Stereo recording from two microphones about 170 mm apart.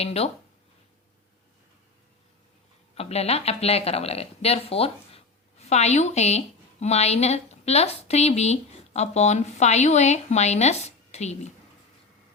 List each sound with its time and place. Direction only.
0.0 s speech: 35° left (ahead or behind)
2.9 s speech: 35° left (ahead or behind)